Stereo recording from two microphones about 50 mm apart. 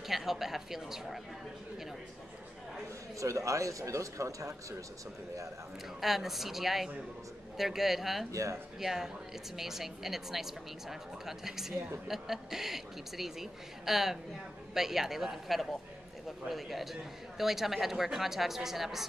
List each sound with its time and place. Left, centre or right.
0.0 s a man's voice: centre
3.2 s speech: right
5.9 s a man's voice: centre
8.3 s speech: right
8.7 s a man's voice: centre